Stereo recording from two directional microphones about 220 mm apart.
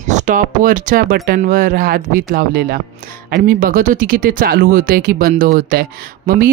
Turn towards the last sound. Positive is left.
turn(degrees=-40)  # may be behind; listen again after turning